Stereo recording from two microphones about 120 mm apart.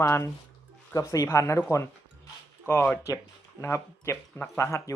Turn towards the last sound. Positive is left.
turn(degrees=25)  # may be behind; listen again after turning